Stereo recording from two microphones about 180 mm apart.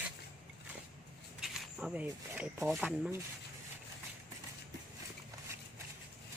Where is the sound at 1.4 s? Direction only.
5° right (ahead or behind).